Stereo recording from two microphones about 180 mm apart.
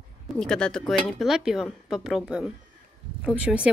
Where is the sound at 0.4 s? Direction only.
5° left (ahead or behind).